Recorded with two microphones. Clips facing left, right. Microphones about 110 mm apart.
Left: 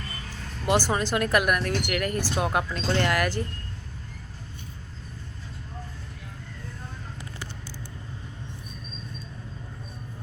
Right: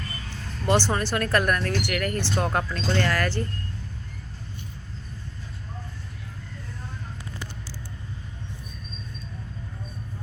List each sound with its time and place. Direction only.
0.6 s speech: 10° left (ahead or behind)